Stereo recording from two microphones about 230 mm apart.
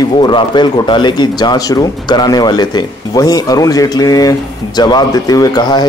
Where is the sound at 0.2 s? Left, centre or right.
Centre.